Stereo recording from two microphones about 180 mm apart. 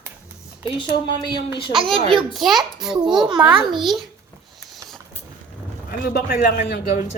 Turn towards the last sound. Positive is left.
turn(degrees=65)  # may be behind; listen again after turning